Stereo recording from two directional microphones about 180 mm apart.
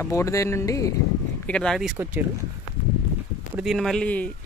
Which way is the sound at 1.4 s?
5° left (ahead or behind).